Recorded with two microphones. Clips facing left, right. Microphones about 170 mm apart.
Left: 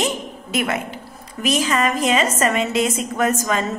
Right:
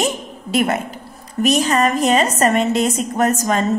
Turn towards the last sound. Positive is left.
turn(degrees=-40)  # may be behind; listen again after turning